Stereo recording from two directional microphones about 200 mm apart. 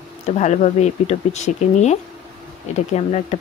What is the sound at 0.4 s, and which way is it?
Speech, 35° left (ahead or behind).